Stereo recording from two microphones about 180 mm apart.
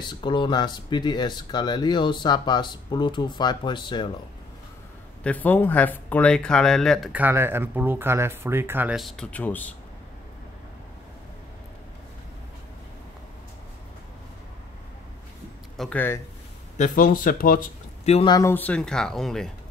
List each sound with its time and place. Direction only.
0.0 s speech: 25° left (ahead or behind)
5.2 s speech: 10° left (ahead or behind)
15.8 s speech: 10° left (ahead or behind)
16.7 s speech: 45° left (ahead or behind)
18.0 s speech: 35° left (ahead or behind)
18.3 s speech: 15° left (ahead or behind)